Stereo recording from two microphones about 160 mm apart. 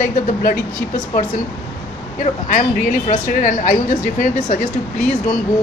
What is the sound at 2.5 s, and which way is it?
Speech, 50° left (ahead or behind).